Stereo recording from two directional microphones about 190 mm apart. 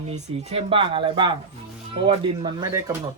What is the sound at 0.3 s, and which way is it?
Speech, 30° right (ahead or behind).